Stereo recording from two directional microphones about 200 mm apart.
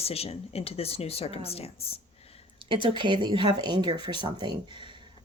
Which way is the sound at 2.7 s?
25° right (ahead or behind).